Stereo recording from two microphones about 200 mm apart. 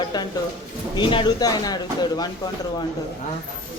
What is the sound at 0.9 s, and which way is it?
Speech, 25° left (ahead or behind).